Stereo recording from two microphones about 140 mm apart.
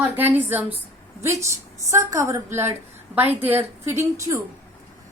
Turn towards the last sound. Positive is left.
turn(degrees=-20)  # may be behind; listen again after turning